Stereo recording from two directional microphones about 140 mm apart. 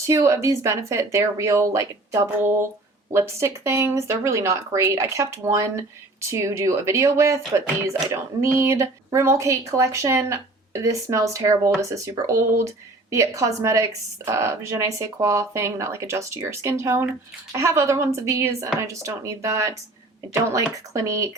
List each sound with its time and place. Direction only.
0.0 s speech: 20° right (ahead or behind)
20.9 s speech: 20° right (ahead or behind)